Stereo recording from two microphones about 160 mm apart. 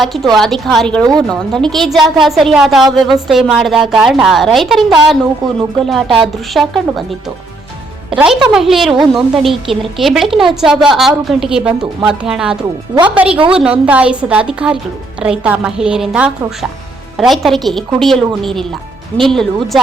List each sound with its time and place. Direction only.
0.0 s a woman's voice: centre (ahead or behind)
1.0 s a woman's voice: 25° right (ahead or behind)
1.6 s a woman's voice: centre (ahead or behind)
8.1 s a woman's voice: 5° right (ahead or behind)
19.3 s a woman's voice: centre (ahead or behind)